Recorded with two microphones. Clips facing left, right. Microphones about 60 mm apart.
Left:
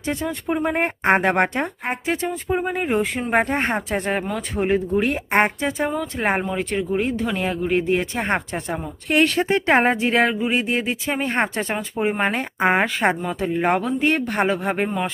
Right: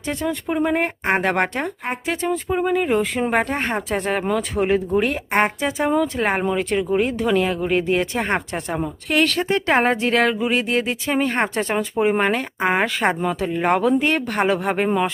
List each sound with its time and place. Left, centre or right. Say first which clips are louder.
0.1 s speech: right 1 dB; centre
0.7 s speech: left 1 dB; left
1.9 s speech: right 3 dB; centre
9.1 s speech: left 1 dB; left
9.7 s speech: even; centre
12.2 s speech: even; centre